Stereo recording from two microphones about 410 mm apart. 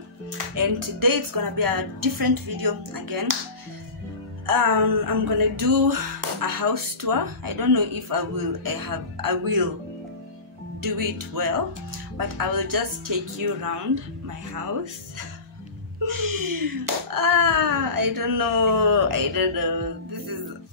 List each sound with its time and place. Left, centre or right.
0.6 s speech: right
4.5 s speech: right
10.8 s speech: right